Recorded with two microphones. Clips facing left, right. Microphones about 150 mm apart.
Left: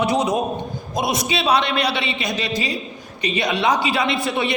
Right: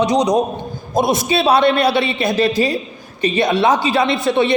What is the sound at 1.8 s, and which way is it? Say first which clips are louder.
Speech: right 7 dB; 50° right (ahead or behind).